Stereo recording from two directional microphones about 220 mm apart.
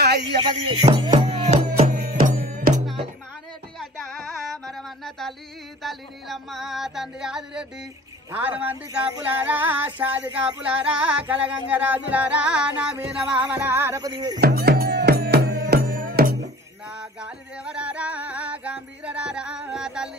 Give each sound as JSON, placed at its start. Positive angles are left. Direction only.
{"t": 0.4, "sound": "music", "side_deg": -20}
{"t": 4.1, "sound": "carnatic music", "side_deg": 0}
{"t": 5.8, "sound": "music", "side_deg": 0}
{"t": 10.6, "sound": "child singing", "side_deg": -5}
{"t": 11.7, "sound": "music", "side_deg": -5}
{"t": 14.4, "sound": "music", "side_deg": -45}
{"t": 17.2, "sound": "music", "side_deg": -5}